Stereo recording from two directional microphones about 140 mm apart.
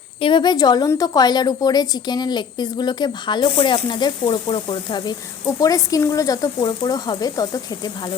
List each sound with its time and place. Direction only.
0.2 s a woman's voice: 35° left (ahead or behind)